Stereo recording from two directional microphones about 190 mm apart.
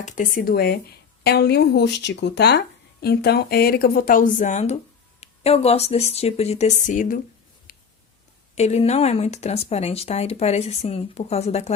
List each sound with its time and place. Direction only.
0.0 s speech: 45° left (ahead or behind)
7.7 s a sound: 45° left (ahead or behind)
8.5 s speech: 35° left (ahead or behind)